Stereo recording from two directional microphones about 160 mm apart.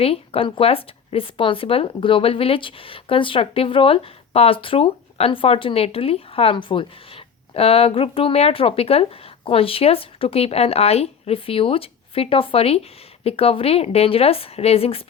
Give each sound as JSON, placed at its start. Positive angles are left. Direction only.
{"t": 0.0, "sound": "speech", "side_deg": 35}